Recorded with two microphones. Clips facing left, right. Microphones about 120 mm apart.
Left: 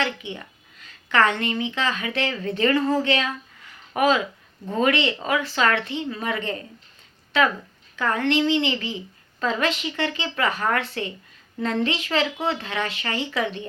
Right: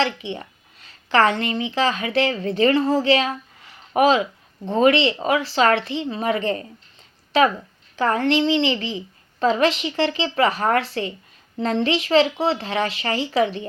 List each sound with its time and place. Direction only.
0.0 s a woman's voice: 30° right (ahead or behind)
7.9 s speech: 35° right (ahead or behind)